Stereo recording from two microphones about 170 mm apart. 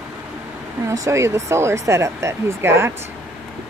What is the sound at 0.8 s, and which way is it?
Speech, 20° right (ahead or behind).